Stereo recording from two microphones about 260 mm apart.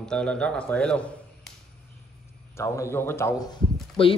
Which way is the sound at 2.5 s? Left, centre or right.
Centre.